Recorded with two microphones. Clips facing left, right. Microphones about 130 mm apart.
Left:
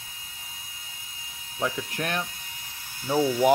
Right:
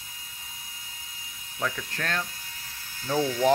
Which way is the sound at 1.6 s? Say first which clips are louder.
Left 3 dB; 25° left (ahead or behind).